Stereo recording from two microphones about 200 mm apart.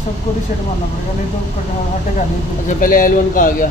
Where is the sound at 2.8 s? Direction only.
45° left (ahead or behind).